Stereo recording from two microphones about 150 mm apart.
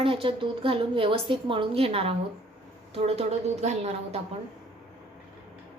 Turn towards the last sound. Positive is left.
turn(degrees=-50)  # may be behind; listen again after turning